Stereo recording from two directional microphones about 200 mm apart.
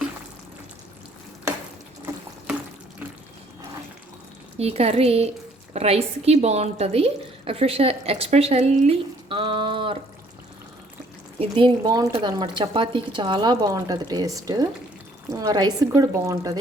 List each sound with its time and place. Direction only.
2.1 s water: 15° right (ahead or behind)
4.5 s a woman's voice: 30° right (ahead or behind)
11.3 s speech: 25° right (ahead or behind)